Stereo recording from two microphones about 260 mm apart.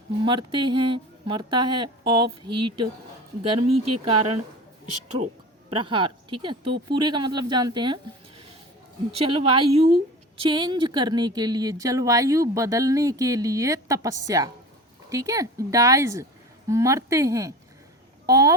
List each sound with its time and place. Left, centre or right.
0.3 s speech: centre
3.6 s speech: right
5.7 s speech: centre
9.1 s speech: right